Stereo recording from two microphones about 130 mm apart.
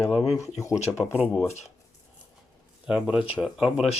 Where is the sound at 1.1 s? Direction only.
10° right (ahead or behind).